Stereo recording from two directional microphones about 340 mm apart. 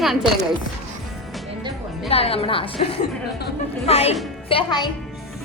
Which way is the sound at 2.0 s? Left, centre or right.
Centre.